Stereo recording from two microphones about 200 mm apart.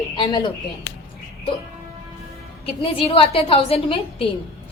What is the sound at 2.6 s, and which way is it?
A woman's voice, 30° left (ahead or behind).